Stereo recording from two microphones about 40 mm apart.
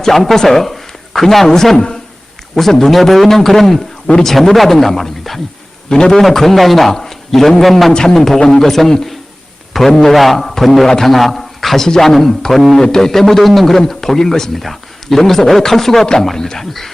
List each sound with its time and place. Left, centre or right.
0.0 s a man's voice: centre
5.9 s a man's voice: centre
7.9 s a man's voice: centre